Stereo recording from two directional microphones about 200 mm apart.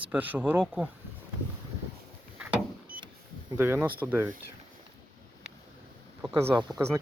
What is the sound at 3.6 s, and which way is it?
Speech, 10° right (ahead or behind).